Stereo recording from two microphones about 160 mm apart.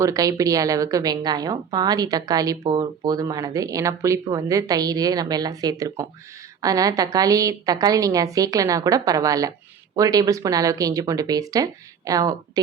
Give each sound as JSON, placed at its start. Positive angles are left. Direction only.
{"t": 0.0, "sound": "a woman's voice", "side_deg": -20}